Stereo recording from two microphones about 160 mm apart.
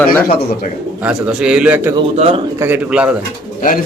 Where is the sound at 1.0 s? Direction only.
5° right (ahead or behind).